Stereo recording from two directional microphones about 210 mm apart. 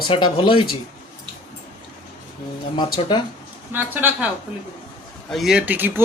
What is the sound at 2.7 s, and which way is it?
Speech, 20° left (ahead or behind).